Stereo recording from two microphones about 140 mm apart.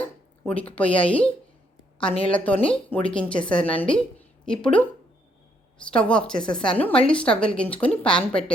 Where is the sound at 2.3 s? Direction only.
10° left (ahead or behind).